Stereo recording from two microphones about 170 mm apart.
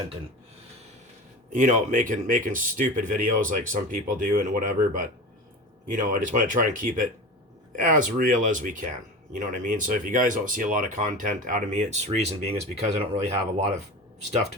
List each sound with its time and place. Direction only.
1.5 s speech: 50° right (ahead or behind)